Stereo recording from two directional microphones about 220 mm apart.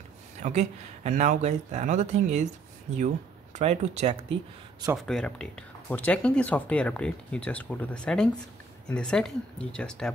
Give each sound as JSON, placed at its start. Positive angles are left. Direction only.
{"t": 0.4, "sound": "speech", "side_deg": -30}
{"t": 3.5, "sound": "speech", "side_deg": -30}
{"t": 4.9, "sound": "speech", "side_deg": 5}